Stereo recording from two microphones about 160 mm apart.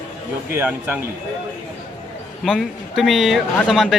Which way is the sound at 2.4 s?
Centre (ahead or behind).